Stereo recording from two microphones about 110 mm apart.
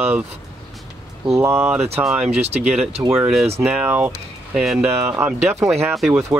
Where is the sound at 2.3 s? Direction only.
75° right (ahead or behind).